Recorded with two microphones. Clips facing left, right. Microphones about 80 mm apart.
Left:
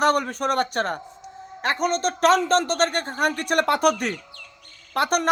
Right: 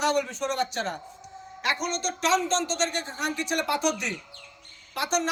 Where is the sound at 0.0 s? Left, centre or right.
Left.